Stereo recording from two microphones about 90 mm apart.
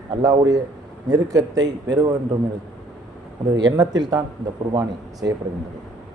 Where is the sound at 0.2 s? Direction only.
40° right (ahead or behind).